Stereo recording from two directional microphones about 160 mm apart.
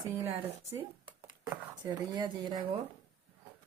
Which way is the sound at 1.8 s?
25° right (ahead or behind).